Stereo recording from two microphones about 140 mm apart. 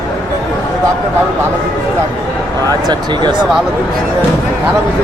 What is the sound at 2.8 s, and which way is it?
Speech, 30° right (ahead or behind).